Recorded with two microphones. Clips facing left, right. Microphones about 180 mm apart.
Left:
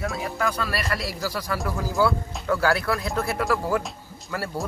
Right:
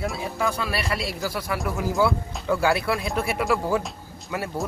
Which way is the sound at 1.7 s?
25° right (ahead or behind).